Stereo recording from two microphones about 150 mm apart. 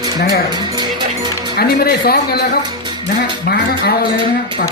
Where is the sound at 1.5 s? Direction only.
90° left.